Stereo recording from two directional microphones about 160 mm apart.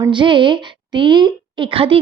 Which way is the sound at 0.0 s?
30° right (ahead or behind).